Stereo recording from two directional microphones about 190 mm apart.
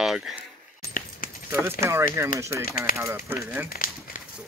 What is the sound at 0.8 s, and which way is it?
Keys jangling, 45° left (ahead or behind).